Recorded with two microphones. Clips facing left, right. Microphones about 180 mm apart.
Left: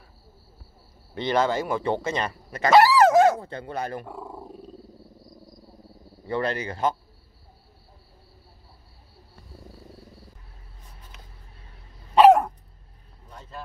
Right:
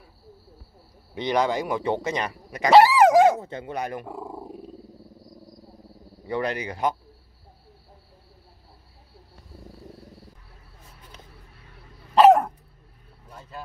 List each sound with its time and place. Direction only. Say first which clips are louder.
1.1 s speech: even; 15° right (ahead or behind)
2.9 s dog: right 1 dB; 15° right (ahead or behind)
6.2 s speech: even; 15° right (ahead or behind)
12.2 s dog: even; centre (ahead or behind)